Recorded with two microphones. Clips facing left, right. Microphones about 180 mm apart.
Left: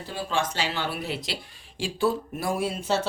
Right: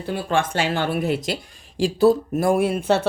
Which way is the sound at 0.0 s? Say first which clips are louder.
Right 6 dB; 60° right (ahead or behind).